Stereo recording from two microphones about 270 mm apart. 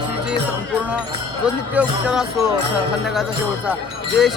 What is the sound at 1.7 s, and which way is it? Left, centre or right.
Speech, centre.